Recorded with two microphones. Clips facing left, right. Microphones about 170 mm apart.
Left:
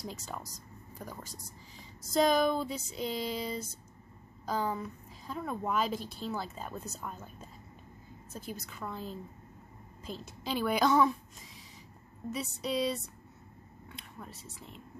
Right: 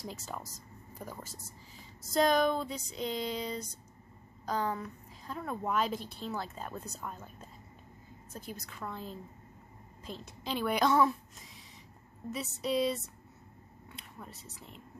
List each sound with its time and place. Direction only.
0.0 s a woman's voice: centre (ahead or behind)